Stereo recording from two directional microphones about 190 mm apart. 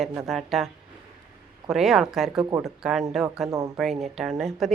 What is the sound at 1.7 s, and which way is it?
A woman's voice, centre (ahead or behind).